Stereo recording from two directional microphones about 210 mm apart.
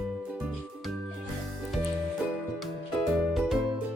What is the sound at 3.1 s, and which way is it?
Music, centre (ahead or behind).